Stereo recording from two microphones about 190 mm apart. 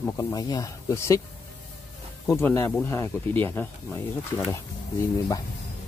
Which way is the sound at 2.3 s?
15° left (ahead or behind).